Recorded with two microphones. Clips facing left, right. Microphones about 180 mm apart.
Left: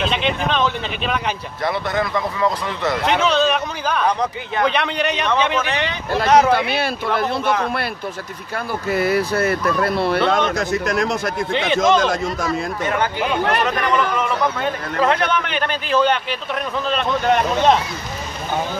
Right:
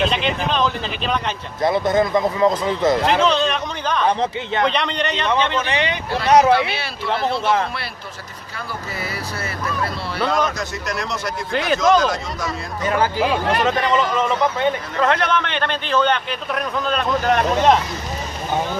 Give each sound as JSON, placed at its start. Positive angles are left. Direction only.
{"t": 0.0, "sound": "speech", "side_deg": 0}
{"t": 1.6, "sound": "a man's voice", "side_deg": -25}
{"t": 3.1, "sound": "a man's voice", "side_deg": 5}
{"t": 5.7, "sound": "speech", "side_deg": -15}
{"t": 6.1, "sound": "speech", "side_deg": 50}
{"t": 11.5, "sound": "speech", "side_deg": 0}
{"t": 12.9, "sound": "speech", "side_deg": -30}
{"t": 15.0, "sound": "a man's voice", "side_deg": 5}